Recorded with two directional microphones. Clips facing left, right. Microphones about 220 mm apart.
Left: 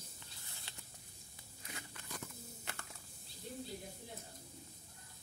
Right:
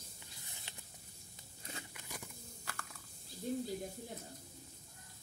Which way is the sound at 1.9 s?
10° right (ahead or behind).